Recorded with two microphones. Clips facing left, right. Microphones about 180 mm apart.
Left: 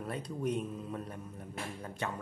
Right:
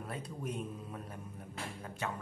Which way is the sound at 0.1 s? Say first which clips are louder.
Left 6 dB; 5° right (ahead or behind).